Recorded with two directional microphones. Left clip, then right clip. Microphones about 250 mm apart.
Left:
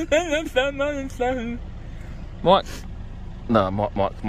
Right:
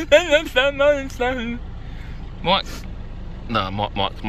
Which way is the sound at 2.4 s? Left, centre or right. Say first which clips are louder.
Left 2 dB; left.